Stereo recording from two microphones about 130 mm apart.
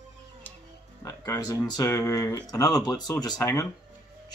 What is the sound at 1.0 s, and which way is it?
Speech, 30° left (ahead or behind).